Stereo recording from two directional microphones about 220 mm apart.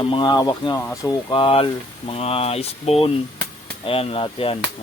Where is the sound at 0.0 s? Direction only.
20° left (ahead or behind).